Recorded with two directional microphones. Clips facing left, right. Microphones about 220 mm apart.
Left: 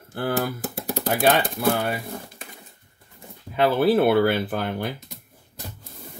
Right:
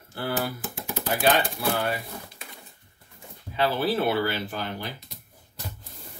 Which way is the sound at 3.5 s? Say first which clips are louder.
Left 6 dB; 55° left (ahead or behind).